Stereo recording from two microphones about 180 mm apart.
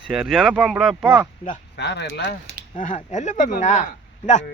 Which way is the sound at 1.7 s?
70° left (ahead or behind).